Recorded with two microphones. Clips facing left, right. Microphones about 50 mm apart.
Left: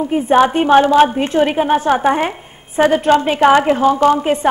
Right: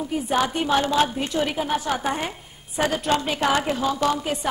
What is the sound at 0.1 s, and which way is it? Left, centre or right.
A woman's voice, left.